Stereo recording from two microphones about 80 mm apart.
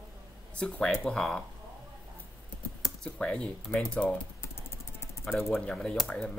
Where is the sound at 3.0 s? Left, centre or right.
Centre.